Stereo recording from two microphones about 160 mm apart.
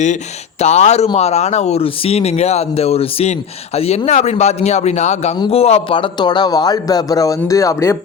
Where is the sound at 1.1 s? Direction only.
40° left (ahead or behind).